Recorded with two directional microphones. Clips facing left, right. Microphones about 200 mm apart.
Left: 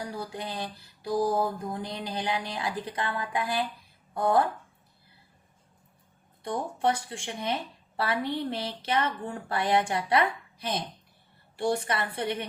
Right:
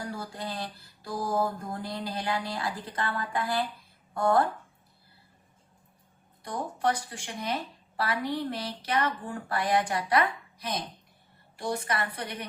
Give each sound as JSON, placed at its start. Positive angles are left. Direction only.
{"t": 0.1, "sound": "speech", "side_deg": 15}
{"t": 6.4, "sound": "speech", "side_deg": 25}